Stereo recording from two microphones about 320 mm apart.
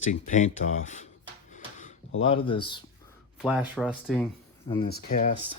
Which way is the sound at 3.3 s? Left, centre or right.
Centre.